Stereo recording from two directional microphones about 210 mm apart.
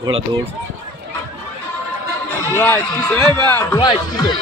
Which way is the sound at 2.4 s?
10° left (ahead or behind).